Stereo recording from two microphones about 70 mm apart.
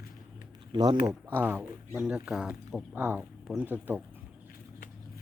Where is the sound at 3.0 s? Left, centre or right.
Right.